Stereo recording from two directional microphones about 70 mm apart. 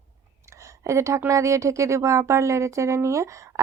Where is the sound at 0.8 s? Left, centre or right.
Right.